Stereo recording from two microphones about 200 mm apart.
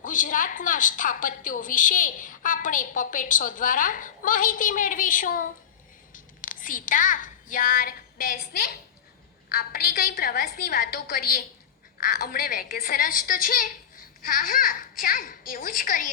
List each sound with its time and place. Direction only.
0.0 s a woman's voice: 40° left (ahead or behind)